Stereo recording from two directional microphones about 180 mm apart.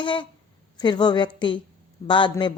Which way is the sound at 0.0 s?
25° left (ahead or behind).